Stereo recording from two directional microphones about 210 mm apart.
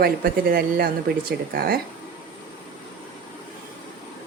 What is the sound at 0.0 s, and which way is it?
A woman's voice, 45° right (ahead or behind).